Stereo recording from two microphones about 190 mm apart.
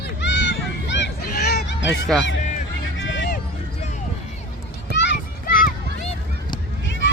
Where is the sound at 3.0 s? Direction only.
70° left (ahead or behind).